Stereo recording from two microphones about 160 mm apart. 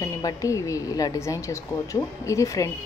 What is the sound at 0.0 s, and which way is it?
A woman's voice, 20° left (ahead or behind).